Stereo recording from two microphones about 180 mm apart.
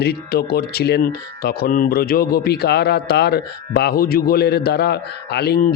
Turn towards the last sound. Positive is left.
turn(degrees=55)  # may be behind; listen again after turning